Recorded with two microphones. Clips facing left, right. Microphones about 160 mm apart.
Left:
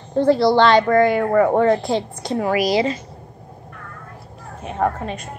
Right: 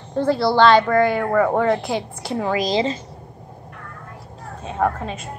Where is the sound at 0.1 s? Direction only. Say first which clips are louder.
Left 4 dB; 15° left (ahead or behind).